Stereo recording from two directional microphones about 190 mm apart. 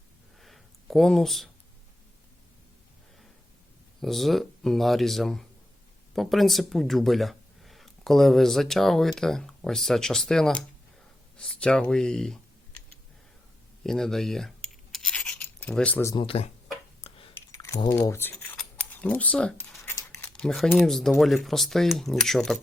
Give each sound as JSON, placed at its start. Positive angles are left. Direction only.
{"t": 0.3, "sound": "a sound", "side_deg": 0}
{"t": 4.0, "sound": "speech", "side_deg": 0}
{"t": 13.8, "sound": "rub", "side_deg": 0}
{"t": 16.1, "sound": "speech", "side_deg": 30}
{"t": 17.0, "sound": "a sound", "side_deg": 30}
{"t": 17.5, "sound": "speech", "side_deg": 15}